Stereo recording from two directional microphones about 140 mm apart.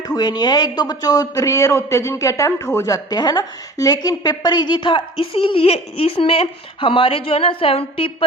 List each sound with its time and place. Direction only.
0.0 s speech: 30° left (ahead or behind)